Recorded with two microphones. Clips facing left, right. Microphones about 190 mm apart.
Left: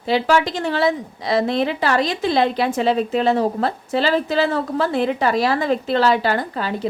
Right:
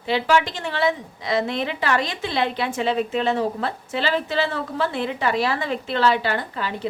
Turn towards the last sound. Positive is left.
turn(degrees=40)  # may be behind; listen again after turning